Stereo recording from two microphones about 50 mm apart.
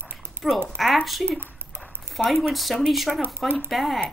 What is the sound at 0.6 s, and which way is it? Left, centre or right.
Speech, centre.